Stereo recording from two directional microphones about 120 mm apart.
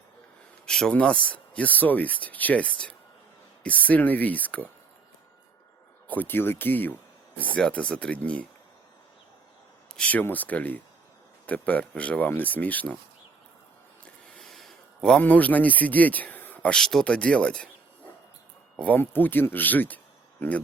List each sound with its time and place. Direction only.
0.6 s speech: 5° left (ahead or behind)
6.1 s speech: 15° left (ahead or behind)
9.9 s speech: 10° left (ahead or behind)
14.3 s speech: centre (ahead or behind)
18.8 s speech: 15° left (ahead or behind)